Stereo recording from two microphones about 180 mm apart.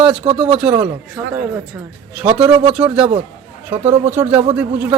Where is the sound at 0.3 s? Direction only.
30° right (ahead or behind).